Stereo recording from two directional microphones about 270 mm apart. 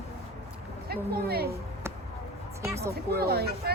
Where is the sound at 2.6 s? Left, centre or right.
Centre.